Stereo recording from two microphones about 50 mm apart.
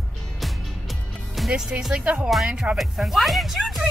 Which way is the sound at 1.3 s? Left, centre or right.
Centre.